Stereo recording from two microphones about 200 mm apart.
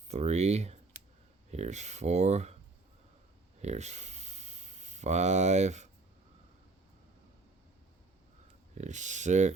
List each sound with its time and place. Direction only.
0.1 s speech: 35° right (ahead or behind)
3.6 s a sound: 35° right (ahead or behind)
8.8 s speech: 35° right (ahead or behind)